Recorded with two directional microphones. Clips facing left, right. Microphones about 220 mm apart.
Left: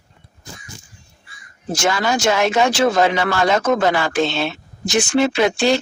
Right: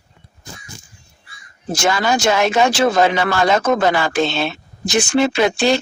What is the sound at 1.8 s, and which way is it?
Speech, 35° right (ahead or behind).